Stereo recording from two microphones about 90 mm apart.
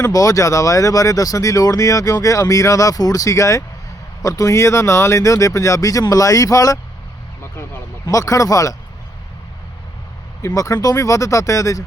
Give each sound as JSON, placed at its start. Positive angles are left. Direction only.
{"t": 0.0, "sound": "speech", "side_deg": 40}
{"t": 8.0, "sound": "speech", "side_deg": 40}
{"t": 10.4, "sound": "speech", "side_deg": 40}